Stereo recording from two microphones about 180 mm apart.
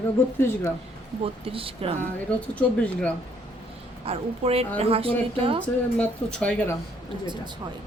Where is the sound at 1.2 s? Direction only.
30° right (ahead or behind).